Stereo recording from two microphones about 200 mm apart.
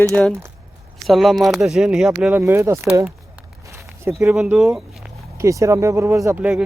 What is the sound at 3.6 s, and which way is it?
Walk, 15° right (ahead or behind).